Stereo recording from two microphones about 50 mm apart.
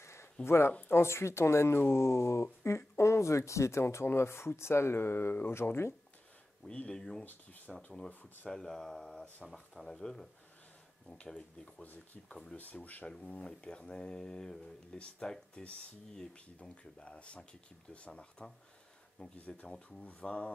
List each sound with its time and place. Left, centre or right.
0.0 s a sound: left
0.4 s speech: left
6.7 s speech: left
7.7 s speech: centre
8.1 s speech: left
8.5 s speech: centre
11.8 s speech: left
13.2 s speech: left
19.4 s speech: left